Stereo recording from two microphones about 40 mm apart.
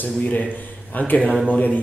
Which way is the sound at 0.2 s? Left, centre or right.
Left.